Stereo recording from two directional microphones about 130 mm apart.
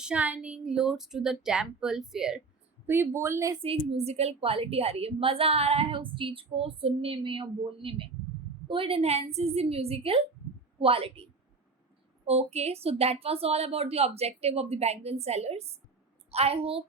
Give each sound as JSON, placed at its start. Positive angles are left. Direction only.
{"t": 0.0, "sound": "speech", "side_deg": -10}
{"t": 2.8, "sound": "speech", "side_deg": -15}
{"t": 3.6, "sound": "a woman's voice", "side_deg": -50}